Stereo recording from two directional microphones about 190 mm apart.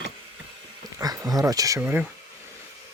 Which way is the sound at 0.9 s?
20° right (ahead or behind).